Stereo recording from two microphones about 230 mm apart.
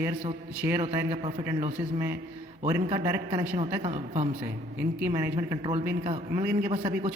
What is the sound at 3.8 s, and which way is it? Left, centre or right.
Speech, right.